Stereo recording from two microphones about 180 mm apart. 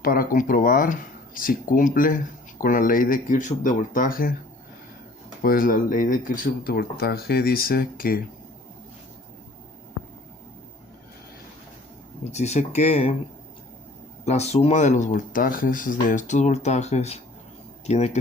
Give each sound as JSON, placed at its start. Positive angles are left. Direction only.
{"t": 0.0, "sound": "speech", "side_deg": 55}
{"t": 5.4, "sound": "speech", "side_deg": 50}
{"t": 12.3, "sound": "speech", "side_deg": 40}
{"t": 14.3, "sound": "speech", "side_deg": 35}